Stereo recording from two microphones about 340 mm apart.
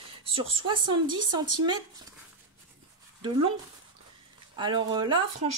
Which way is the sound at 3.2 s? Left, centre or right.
Centre.